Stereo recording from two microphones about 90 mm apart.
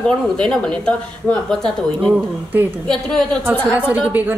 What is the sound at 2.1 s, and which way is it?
Speech, 20° right (ahead or behind).